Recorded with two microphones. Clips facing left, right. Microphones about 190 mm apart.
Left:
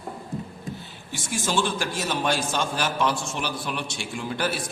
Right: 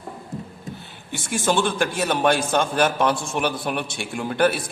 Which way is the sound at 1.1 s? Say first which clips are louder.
Right 4 dB; 55° right (ahead or behind).